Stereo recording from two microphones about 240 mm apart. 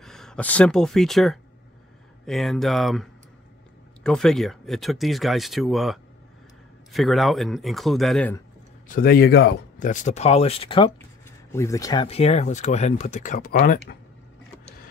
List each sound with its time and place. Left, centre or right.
0.0 s speech: centre
8.8 s speech: left